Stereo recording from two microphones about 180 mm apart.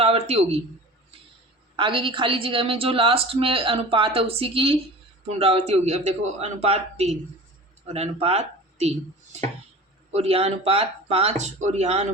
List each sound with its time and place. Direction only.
0.0 s speech: 35° right (ahead or behind)
1.7 s a woman's voice: 30° right (ahead or behind)
10.1 s a woman's voice: 35° right (ahead or behind)